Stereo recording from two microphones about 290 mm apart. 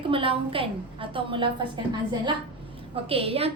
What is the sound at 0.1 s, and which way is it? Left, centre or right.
A woman's voice, centre.